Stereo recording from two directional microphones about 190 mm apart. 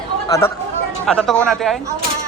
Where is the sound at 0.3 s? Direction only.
15° left (ahead or behind).